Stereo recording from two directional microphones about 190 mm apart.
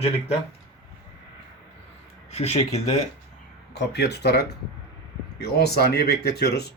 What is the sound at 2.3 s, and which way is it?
Speech, 35° left (ahead or behind).